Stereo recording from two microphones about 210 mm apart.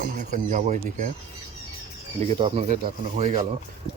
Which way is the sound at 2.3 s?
30° right (ahead or behind).